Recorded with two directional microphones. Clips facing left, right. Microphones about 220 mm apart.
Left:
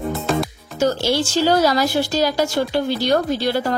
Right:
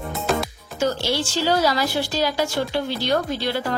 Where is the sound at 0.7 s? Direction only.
45° left (ahead or behind).